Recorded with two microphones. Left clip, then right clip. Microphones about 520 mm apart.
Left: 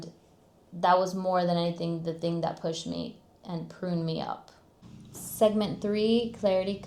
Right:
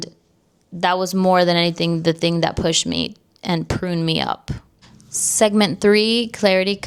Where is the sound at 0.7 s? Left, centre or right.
Right.